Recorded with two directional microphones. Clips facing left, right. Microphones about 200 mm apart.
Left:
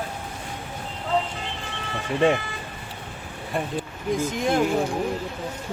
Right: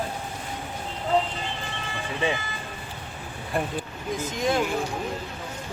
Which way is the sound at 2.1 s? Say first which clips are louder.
Left 7 dB; 55° left (ahead or behind).